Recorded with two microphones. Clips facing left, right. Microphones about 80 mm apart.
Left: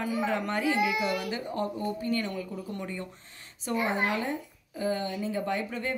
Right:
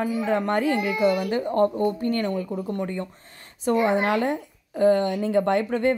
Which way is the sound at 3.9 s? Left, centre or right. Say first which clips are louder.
Right 7 dB; right.